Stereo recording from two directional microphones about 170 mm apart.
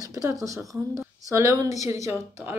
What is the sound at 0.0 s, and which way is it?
Speech, 20° right (ahead or behind).